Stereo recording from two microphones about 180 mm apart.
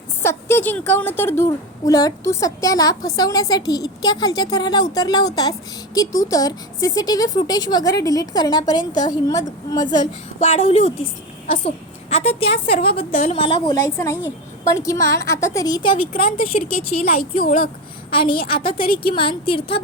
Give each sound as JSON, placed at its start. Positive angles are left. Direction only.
{"t": 0.2, "sound": "a sound", "side_deg": 15}
{"t": 0.9, "sound": "a woman's voice", "side_deg": 10}
{"t": 10.5, "sound": "a woman's voice", "side_deg": 35}
{"t": 12.1, "sound": "a woman's voice", "side_deg": 30}
{"t": 13.8, "sound": "a woman's voice", "side_deg": 15}
{"t": 16.5, "sound": "speech", "side_deg": 55}
{"t": 18.1, "sound": "a woman's voice", "side_deg": 30}